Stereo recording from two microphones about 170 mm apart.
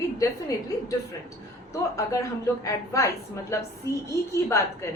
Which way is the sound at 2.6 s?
20° left (ahead or behind).